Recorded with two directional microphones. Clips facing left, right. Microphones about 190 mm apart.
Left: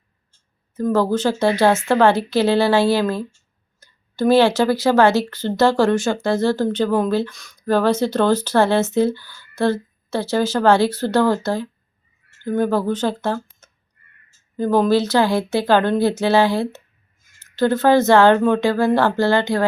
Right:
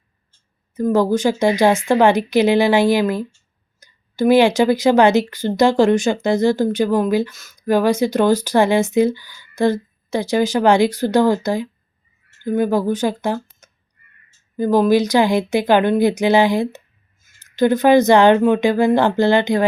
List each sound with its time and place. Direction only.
0.9 s a woman's voice: 15° right (ahead or behind)